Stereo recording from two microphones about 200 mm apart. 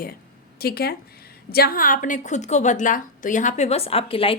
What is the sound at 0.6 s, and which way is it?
A woman's voice, 50° left (ahead or behind).